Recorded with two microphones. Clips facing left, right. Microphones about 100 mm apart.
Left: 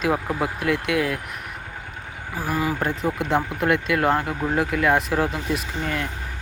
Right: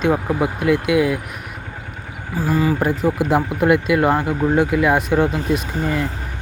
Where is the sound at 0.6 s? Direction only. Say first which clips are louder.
Right 7 dB; centre (ahead or behind).